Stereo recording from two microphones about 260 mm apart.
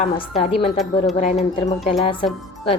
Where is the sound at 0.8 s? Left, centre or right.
Centre.